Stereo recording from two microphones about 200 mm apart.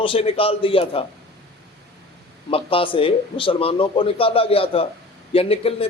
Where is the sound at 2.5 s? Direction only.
25° left (ahead or behind).